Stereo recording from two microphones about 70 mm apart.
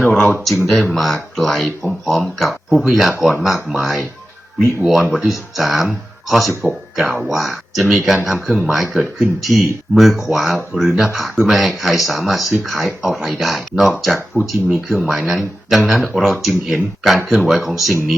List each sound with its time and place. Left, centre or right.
0.0 s speech: left
0.7 s speech: centre